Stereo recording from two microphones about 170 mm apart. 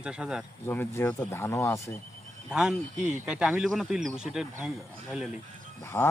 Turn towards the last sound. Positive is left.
turn(degrees=15)  # may be behind; listen again after turning